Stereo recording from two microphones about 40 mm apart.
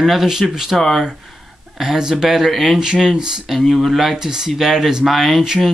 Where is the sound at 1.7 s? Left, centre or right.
Centre.